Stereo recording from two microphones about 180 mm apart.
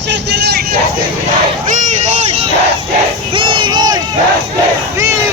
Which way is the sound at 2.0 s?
40° right (ahead or behind).